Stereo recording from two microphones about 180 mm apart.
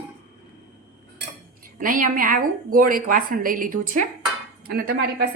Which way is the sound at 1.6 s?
50° right (ahead or behind).